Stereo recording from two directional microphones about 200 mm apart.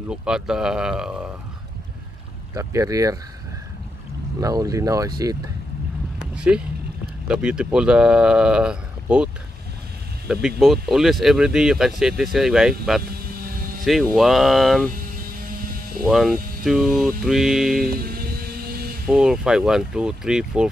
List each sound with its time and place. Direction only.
0.1 s speech: 5° right (ahead or behind)
2.5 s speech: 15° right (ahead or behind)
4.4 s speech: 15° right (ahead or behind)
6.3 s speech: 5° right (ahead or behind)
16.1 s speech: centre (ahead or behind)
18.0 s a sound: 50° right (ahead or behind)
19.0 s speech: 5° right (ahead or behind)